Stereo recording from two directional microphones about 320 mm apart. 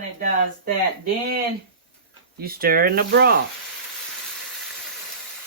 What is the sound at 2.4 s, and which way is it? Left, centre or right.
Speech, right.